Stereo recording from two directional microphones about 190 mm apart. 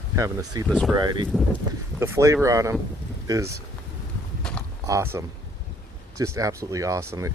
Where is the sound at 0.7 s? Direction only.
5° right (ahead or behind).